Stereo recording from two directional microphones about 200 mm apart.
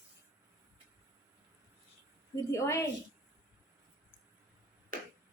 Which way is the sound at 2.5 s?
15° left (ahead or behind).